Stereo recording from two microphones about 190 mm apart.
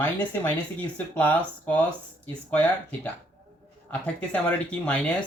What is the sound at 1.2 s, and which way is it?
Speech, 10° left (ahead or behind).